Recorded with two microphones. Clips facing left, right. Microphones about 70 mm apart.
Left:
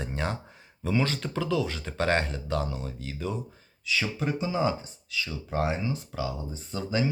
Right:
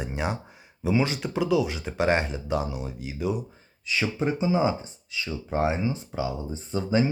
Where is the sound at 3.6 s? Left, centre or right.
Right.